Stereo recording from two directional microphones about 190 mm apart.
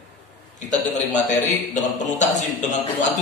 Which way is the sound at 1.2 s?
40° left (ahead or behind).